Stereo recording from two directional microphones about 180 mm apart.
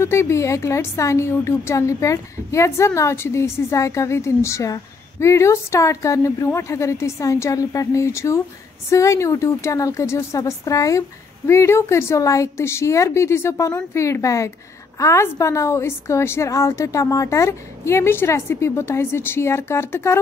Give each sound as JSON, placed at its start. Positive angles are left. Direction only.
{"t": 0.0, "sound": "a woman's voice", "side_deg": 15}